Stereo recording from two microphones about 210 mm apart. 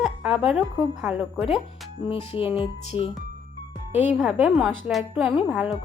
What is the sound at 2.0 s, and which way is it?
Speech, 25° left (ahead or behind).